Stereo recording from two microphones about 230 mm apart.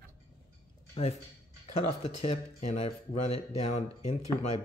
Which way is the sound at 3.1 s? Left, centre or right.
Left.